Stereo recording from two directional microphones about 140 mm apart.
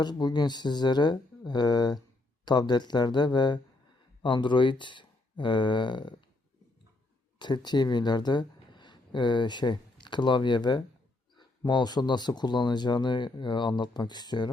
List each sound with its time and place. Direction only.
0.0 s speech: 30° left (ahead or behind)
7.3 s speech: 35° left (ahead or behind)